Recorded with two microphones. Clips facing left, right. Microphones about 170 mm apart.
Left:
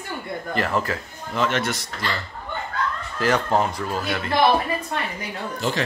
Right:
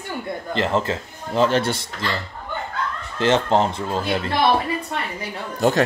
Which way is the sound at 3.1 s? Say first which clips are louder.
Right 3 dB; 25° right (ahead or behind).